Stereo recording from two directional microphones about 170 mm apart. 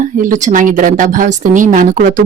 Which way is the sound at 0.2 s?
50° right (ahead or behind).